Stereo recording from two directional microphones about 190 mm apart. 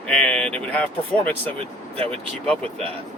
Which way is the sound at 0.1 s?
5° left (ahead or behind).